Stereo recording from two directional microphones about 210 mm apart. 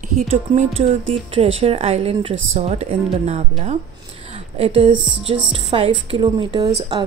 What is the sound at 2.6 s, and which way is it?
Speech, 30° right (ahead or behind).